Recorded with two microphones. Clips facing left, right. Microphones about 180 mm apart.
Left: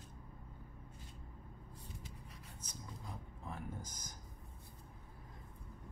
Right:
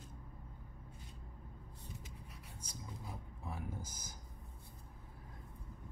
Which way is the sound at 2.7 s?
10° right (ahead or behind).